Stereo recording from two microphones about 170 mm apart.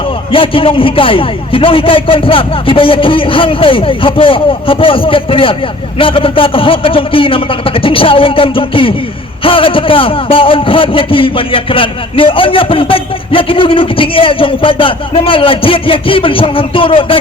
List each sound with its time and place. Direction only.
0.3 s a man's voice: 30° left (ahead or behind)